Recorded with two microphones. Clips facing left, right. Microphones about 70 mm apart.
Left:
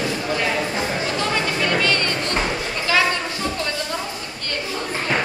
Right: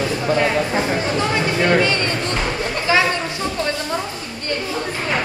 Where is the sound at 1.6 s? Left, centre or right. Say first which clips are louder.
Right 6 dB; right.